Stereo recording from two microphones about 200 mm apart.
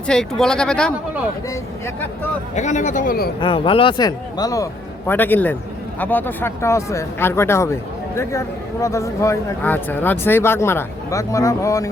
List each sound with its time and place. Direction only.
0.1 s speech: 5° left (ahead or behind)
2.6 s speech: 35° left (ahead or behind)
3.4 s a man's voice: 25° left (ahead or behind)